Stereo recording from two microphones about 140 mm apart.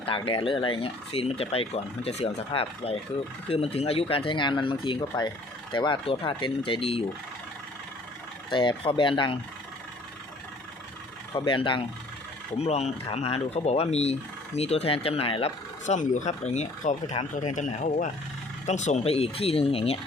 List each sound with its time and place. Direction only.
0.0 s speech: 40° left (ahead or behind)
8.4 s speech: 35° left (ahead or behind)
11.3 s speech: 35° left (ahead or behind)
12.5 s speech: 50° left (ahead or behind)
15.9 s speech: 60° left (ahead or behind); by 20.0 s 45° left (ahead or behind)